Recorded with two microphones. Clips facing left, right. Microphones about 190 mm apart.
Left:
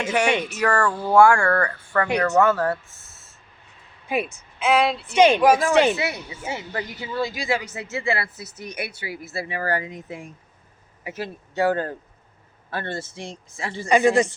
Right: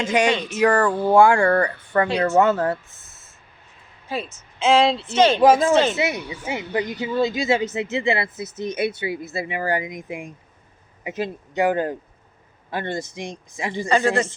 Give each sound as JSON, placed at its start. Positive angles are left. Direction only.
{"t": 0.3, "sound": "speech", "side_deg": 15}
{"t": 0.6, "sound": "a woman's voice", "side_deg": -15}
{"t": 4.1, "sound": "speech", "side_deg": 15}
{"t": 4.6, "sound": "a woman's voice", "side_deg": -25}
{"t": 5.1, "sound": "speech", "side_deg": 15}
{"t": 5.4, "sound": "a woman's voice", "side_deg": -25}
{"t": 5.7, "sound": "speech", "side_deg": 15}
{"t": 6.0, "sound": "a woman's voice", "side_deg": -20}
{"t": 13.8, "sound": "speech", "side_deg": 15}